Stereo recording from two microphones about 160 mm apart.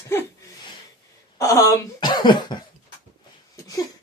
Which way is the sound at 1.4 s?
20° left (ahead or behind).